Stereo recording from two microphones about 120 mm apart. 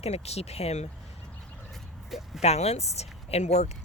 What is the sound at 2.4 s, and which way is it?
Speech, 60° left (ahead or behind).